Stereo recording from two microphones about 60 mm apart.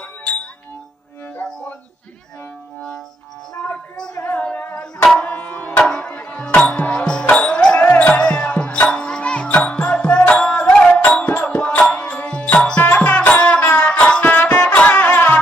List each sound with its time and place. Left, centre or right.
4.2 s singing: left
4.4 s music: left
5.1 s tabla: left
6.1 s music: left
14.2 s music: left